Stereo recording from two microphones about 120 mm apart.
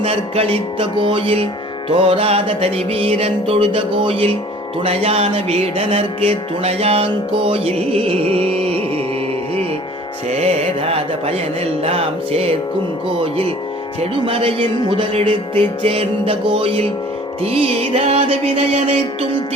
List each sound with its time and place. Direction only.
0.0 s music: 50° right (ahead or behind)
10.2 s music: 65° right (ahead or behind)
14.0 s music: 50° right (ahead or behind)
18.7 s music: 65° right (ahead or behind)